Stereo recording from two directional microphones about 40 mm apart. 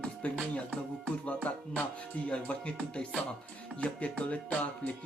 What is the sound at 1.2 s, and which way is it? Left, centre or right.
Music, left.